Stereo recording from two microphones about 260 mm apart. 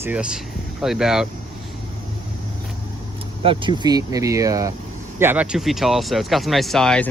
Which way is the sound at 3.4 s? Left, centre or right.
Centre.